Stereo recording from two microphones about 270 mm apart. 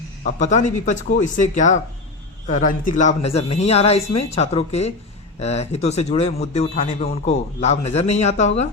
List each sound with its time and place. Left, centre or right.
0.3 s a man's voice: left